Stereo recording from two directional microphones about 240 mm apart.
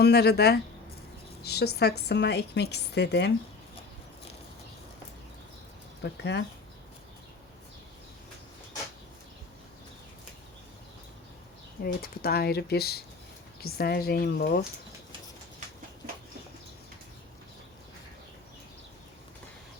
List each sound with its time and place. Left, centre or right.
0.0 s a woman's voice: left
6.0 s speech: left
11.8 s speech: left